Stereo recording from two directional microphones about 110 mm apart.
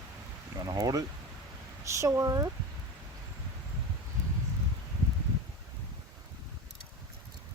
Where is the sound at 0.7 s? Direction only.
35° right (ahead or behind).